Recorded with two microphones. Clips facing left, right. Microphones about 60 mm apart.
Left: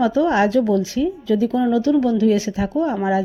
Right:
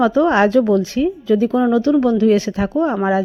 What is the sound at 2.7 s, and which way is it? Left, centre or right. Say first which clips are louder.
Speech: right 3 dB; right.